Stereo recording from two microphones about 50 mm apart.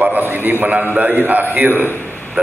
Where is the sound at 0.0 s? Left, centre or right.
Right.